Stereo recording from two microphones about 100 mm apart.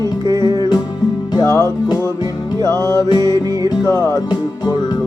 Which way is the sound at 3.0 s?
45° left (ahead or behind).